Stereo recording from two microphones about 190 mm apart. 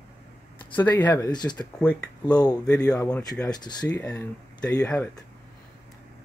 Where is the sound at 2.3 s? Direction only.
20° left (ahead or behind).